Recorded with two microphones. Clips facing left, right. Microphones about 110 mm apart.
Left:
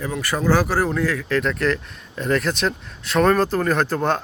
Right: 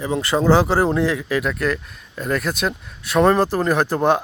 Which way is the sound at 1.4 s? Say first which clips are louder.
Even; 5° right (ahead or behind).